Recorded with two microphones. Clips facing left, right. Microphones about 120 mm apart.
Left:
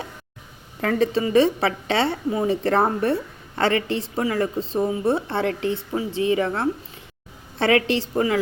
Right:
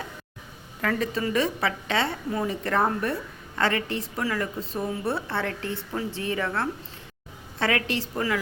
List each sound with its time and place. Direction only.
0.8 s speech: 30° left (ahead or behind)